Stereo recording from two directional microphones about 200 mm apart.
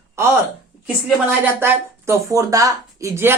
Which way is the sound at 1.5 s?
15° right (ahead or behind).